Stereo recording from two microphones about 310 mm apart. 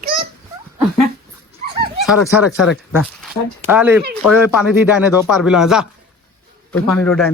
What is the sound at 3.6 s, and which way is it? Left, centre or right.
Speech, centre.